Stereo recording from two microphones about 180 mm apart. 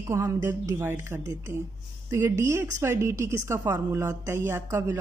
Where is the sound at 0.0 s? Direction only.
15° right (ahead or behind).